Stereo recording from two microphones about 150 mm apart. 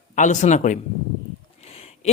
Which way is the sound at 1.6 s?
45° left (ahead or behind).